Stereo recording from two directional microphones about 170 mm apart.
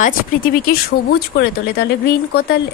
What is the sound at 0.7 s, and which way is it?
Speech, 65° left (ahead or behind).